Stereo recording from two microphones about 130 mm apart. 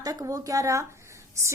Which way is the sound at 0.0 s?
30° right (ahead or behind).